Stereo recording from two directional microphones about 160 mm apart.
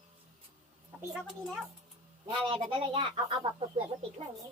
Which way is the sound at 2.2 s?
35° right (ahead or behind).